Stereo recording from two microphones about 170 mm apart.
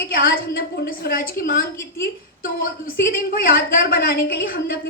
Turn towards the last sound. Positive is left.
turn(degrees=60)  # may be behind; listen again after turning